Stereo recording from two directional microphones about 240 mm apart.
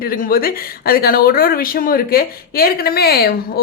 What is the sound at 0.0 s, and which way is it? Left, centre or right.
A woman's voice, left.